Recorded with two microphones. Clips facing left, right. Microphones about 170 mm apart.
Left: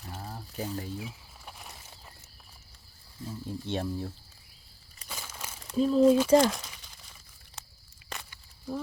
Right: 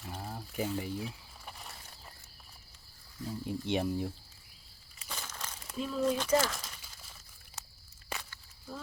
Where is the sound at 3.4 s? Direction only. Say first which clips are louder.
Right 1 dB; 15° right (ahead or behind).